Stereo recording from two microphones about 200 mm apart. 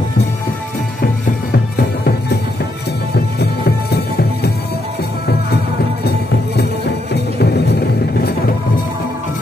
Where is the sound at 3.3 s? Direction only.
55° left (ahead or behind).